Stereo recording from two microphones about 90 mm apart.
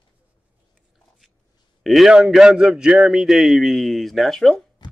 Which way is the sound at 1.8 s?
5° right (ahead or behind).